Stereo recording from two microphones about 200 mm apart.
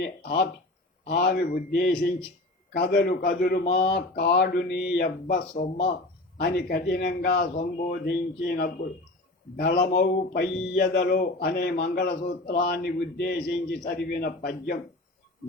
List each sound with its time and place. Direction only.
0.0 s a man's voice: 50° left (ahead or behind)